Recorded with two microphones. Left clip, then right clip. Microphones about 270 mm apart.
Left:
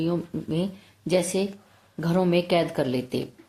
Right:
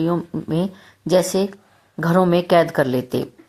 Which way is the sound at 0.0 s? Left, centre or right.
Right.